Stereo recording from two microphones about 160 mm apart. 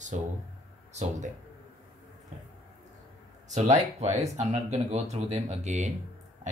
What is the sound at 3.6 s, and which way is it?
Speech, 45° right (ahead or behind).